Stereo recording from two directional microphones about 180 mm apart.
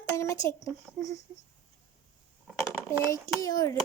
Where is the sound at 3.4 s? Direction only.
20° left (ahead or behind).